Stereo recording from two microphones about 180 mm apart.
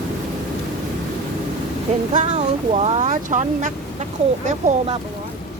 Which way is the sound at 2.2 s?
35° right (ahead or behind).